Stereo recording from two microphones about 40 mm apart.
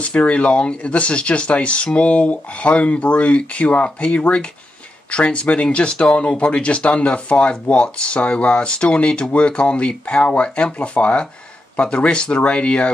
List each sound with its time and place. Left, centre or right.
0.0 s speech: left